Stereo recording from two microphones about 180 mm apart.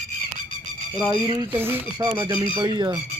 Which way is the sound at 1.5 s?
10° right (ahead or behind).